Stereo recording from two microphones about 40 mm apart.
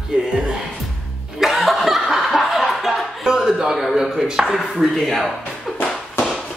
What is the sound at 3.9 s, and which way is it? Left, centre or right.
Music, centre.